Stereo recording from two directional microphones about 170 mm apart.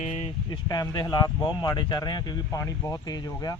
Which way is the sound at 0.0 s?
40° left (ahead or behind).